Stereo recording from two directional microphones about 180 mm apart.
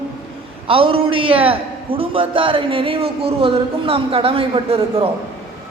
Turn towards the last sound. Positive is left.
turn(degrees=-30)  # may be behind; listen again after turning